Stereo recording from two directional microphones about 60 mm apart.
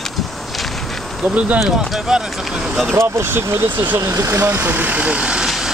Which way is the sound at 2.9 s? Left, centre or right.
Right.